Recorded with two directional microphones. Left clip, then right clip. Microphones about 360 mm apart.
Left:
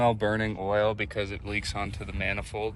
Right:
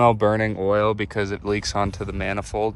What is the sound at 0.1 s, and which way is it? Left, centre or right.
Speech, right.